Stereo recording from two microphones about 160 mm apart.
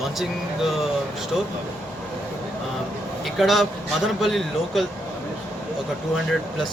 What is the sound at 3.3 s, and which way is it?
A man's voice, centre (ahead or behind).